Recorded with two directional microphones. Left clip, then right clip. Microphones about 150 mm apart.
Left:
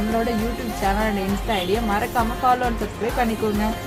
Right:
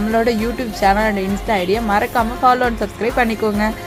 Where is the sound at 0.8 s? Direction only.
50° right (ahead or behind).